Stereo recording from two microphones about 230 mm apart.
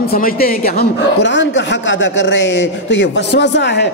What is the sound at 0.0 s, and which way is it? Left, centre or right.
A woman's voice, left.